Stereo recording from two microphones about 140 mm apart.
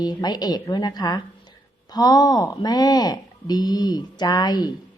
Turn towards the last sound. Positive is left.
turn(degrees=30)  # may be behind; listen again after turning